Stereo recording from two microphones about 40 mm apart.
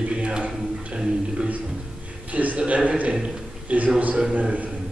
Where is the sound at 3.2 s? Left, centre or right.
Right.